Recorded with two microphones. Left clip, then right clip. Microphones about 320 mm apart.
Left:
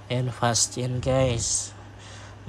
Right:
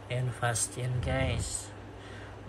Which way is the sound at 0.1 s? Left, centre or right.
Centre.